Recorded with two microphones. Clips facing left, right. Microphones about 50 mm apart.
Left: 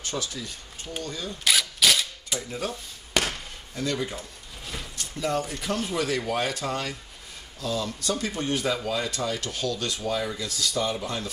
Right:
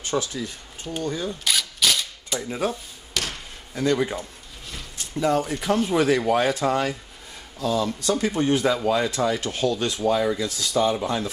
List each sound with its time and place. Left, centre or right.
0.1 s speech: right
1.4 s camera: centre
3.1 s basketball bounce: left
3.7 s speech: right